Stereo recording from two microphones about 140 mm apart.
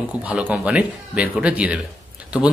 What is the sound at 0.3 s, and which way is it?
Speech, 10° right (ahead or behind).